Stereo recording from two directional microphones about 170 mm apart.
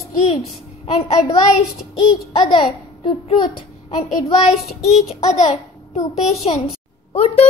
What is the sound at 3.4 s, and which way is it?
Speech, 30° left (ahead or behind).